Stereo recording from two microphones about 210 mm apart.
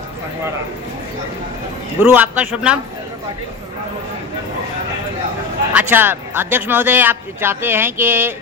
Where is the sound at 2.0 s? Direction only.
10° right (ahead or behind).